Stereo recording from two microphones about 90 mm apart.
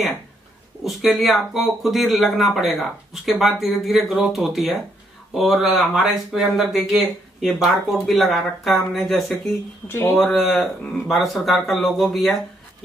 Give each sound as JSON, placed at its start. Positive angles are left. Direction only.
{"t": 0.8, "sound": "speech", "side_deg": 0}
{"t": 9.8, "sound": "speech", "side_deg": 25}
{"t": 10.2, "sound": "speech", "side_deg": 0}